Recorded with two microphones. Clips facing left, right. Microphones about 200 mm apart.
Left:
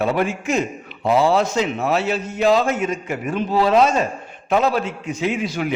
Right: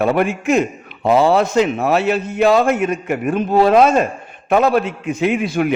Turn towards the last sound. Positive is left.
turn(degrees=-55)  # may be behind; listen again after turning